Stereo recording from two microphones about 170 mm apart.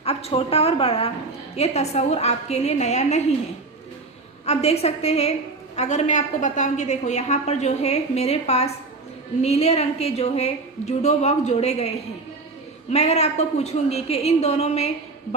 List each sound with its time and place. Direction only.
0.0 s a woman's voice: 35° left (ahead or behind)
4.4 s a woman's voice: 35° left (ahead or behind)